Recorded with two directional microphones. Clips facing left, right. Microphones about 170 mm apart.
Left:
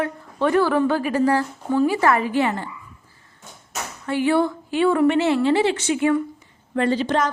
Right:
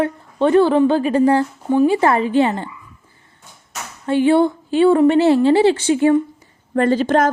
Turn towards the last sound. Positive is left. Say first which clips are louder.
# right 5 dB
turn(degrees=-50)  # may be behind; listen again after turning